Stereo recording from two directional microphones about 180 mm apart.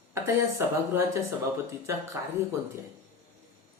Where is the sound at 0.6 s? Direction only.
15° right (ahead or behind).